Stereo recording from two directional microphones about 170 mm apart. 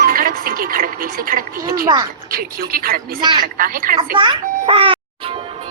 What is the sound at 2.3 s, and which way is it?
Speech, 60° right (ahead or behind).